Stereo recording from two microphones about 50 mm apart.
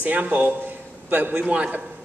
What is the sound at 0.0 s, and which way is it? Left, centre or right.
A man's voice, right.